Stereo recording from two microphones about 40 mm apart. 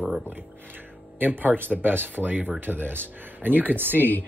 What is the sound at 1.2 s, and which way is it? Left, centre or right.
Speech, right.